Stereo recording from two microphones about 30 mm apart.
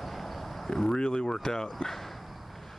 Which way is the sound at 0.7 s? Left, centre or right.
Left.